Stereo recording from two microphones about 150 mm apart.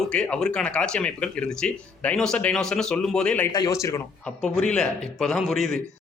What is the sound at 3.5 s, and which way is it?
Speech, 25° left (ahead or behind).